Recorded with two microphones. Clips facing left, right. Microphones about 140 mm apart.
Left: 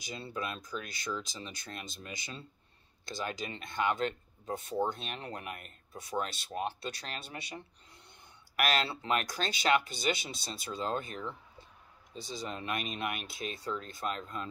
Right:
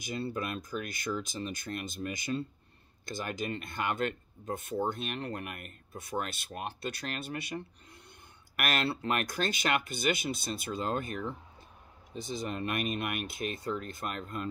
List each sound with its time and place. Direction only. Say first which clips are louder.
0.0 s speech: right 4 dB; 50° right (ahead or behind)